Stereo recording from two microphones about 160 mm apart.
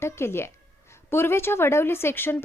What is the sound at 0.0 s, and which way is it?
A woman's voice, 15° left (ahead or behind).